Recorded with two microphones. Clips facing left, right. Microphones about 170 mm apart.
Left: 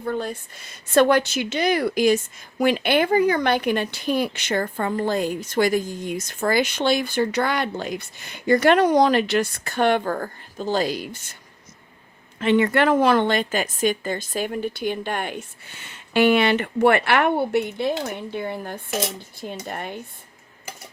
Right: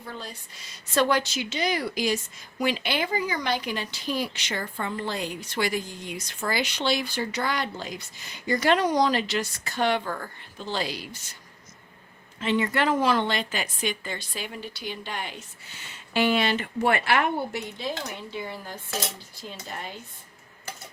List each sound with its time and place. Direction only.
0.0 s a woman's voice: 55° left (ahead or behind)
12.4 s a woman's voice: 60° left (ahead or behind)